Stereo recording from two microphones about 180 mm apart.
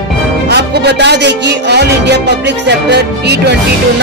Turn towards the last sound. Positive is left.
turn(degrees=-70)  # may be behind; listen again after turning